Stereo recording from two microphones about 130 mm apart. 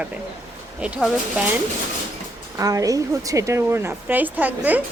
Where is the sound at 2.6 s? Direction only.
25° right (ahead or behind).